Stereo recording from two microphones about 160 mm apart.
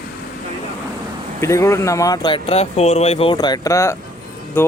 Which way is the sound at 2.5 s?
40° left (ahead or behind).